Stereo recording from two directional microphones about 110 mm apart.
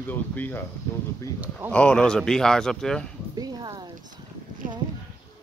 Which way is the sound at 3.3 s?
35° right (ahead or behind).